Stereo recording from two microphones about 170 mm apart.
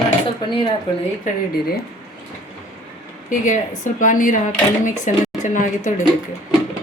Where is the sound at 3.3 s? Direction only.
50° left (ahead or behind).